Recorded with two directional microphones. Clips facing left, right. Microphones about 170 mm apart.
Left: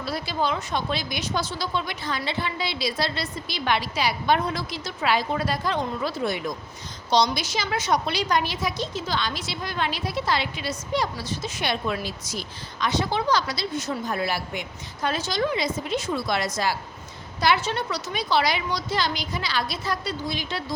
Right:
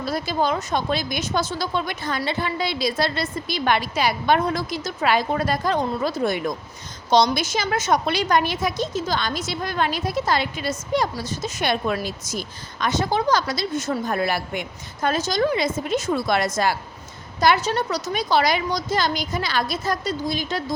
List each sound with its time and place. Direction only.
0.0 s a woman's voice: 45° right (ahead or behind)